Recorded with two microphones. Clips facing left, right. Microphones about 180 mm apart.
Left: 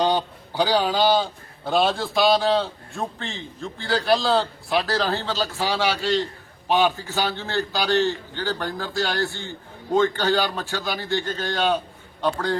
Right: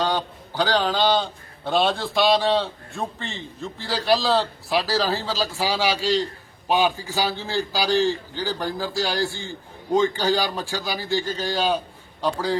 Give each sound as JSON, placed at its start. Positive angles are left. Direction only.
{"t": 0.0, "sound": "a man's voice", "side_deg": 15}